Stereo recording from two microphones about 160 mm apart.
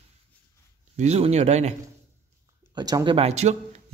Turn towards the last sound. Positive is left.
turn(degrees=-40)  # may be behind; listen again after turning